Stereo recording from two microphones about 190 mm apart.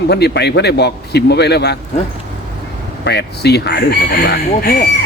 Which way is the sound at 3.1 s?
60° left (ahead or behind).